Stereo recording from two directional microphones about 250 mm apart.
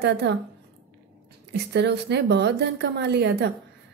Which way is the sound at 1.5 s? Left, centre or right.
Right.